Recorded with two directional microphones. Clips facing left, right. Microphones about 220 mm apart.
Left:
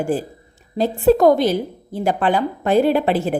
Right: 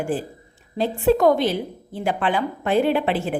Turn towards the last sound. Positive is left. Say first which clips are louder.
# left 4 dB
turn(degrees=40)  # may be behind; listen again after turning